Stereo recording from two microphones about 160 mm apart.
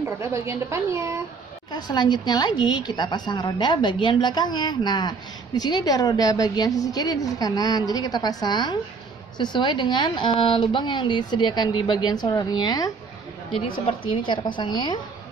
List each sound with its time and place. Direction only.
0.2 s a woman's voice: 15° right (ahead or behind)
1.7 s speech: 25° left (ahead or behind)